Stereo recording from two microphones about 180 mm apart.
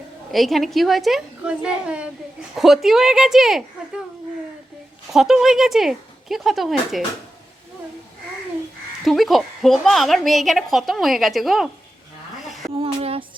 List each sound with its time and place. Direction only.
0.3 s a woman's voice: centre (ahead or behind)
5.1 s a woman's voice: centre (ahead or behind)
9.0 s a woman's voice: centre (ahead or behind)
12.7 s a sound: 30° right (ahead or behind)